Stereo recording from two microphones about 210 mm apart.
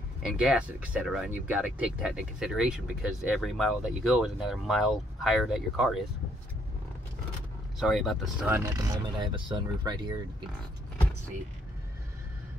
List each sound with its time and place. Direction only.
0.2 s speech: 5° right (ahead or behind)
7.8 s speech: centre (ahead or behind); by 10.2 s 20° right (ahead or behind)